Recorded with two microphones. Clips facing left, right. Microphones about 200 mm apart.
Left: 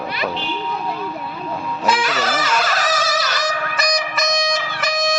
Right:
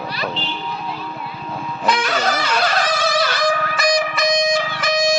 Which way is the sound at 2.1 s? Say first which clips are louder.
Right 1 dB; 45° left (ahead or behind).